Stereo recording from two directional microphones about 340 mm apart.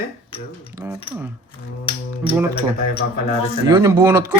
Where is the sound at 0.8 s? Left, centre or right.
Centre.